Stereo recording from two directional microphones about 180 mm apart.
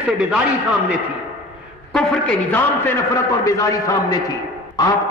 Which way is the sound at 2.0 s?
5° left (ahead or behind).